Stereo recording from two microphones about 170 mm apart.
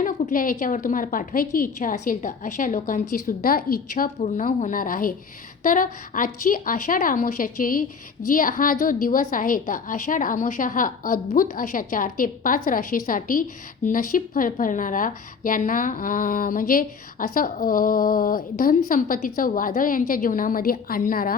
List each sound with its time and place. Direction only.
0.0 s a woman's voice: 55° left (ahead or behind)